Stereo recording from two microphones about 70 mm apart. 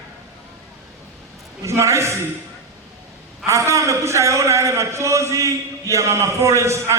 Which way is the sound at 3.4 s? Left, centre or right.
Right.